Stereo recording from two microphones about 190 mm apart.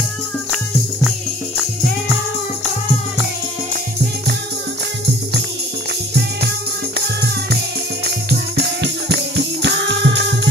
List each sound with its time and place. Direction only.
8.3 s music: 60° right (ahead or behind)